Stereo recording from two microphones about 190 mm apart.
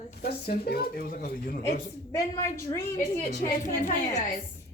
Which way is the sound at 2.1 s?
20° left (ahead or behind).